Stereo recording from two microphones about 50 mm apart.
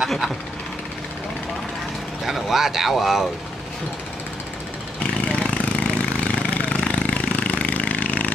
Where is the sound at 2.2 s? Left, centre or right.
Centre.